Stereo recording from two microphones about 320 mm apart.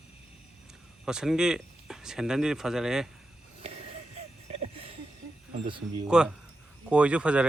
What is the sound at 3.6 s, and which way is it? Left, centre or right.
Music, centre.